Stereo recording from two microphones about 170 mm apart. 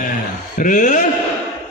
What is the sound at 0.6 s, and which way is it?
Speech, 45° left (ahead or behind).